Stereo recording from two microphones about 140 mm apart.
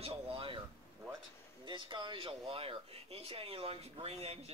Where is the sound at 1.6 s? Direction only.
35° right (ahead or behind).